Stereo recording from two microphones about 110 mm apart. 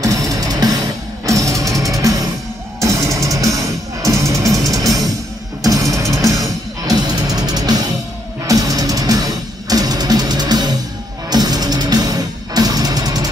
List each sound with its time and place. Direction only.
0.0 s music: 30° right (ahead or behind)